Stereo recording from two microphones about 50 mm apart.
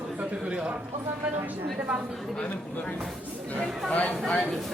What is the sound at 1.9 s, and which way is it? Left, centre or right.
Speech, right.